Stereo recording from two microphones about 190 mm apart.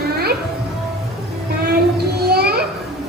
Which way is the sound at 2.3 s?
55° right (ahead or behind).